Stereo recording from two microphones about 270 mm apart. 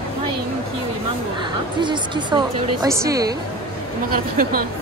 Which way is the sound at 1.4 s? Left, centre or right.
Centre.